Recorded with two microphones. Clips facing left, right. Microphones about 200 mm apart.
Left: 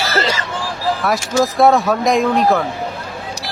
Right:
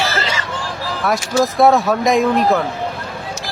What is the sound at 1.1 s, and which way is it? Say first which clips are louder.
Speech: right 2 dB; centre (ahead or behind).